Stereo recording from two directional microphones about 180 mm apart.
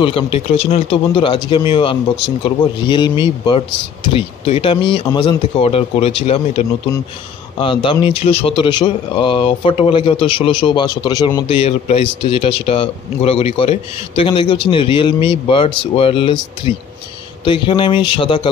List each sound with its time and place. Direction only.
0.0 s a man's voice: 30° left (ahead or behind)